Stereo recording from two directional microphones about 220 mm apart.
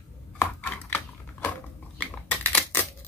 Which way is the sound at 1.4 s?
5° left (ahead or behind).